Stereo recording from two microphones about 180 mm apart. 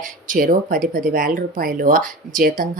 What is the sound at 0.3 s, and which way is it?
Speech, 50° right (ahead or behind).